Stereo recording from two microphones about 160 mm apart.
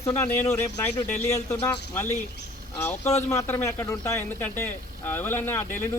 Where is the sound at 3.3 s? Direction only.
15° left (ahead or behind).